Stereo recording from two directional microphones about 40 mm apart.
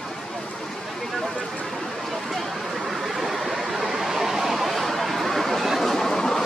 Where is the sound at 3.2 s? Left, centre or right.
Centre.